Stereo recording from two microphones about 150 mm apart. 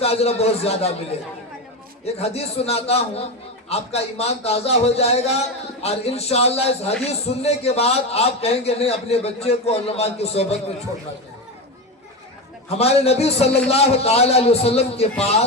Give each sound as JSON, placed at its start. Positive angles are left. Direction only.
{"t": 0.0, "sound": "a man's voice", "side_deg": 40}
{"t": 2.1, "sound": "a man's voice", "side_deg": 45}
{"t": 12.6, "sound": "a man's voice", "side_deg": 45}